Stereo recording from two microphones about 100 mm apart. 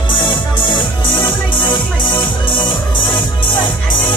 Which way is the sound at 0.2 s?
55° left (ahead or behind).